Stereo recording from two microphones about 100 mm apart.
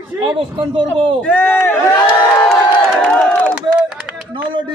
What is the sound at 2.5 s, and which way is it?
Crowd, 10° left (ahead or behind).